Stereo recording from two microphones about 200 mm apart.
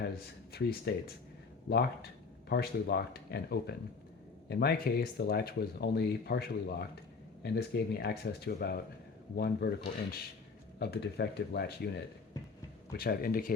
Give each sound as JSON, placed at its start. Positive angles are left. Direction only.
{"t": 0.5, "sound": "speech", "side_deg": 50}